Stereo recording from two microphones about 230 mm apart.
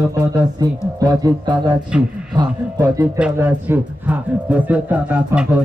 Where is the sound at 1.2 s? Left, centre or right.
Centre.